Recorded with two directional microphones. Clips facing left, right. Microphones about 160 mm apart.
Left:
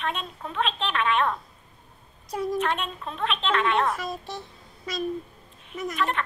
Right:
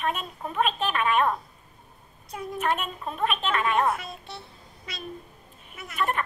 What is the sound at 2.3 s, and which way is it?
Speech, 40° left (ahead or behind).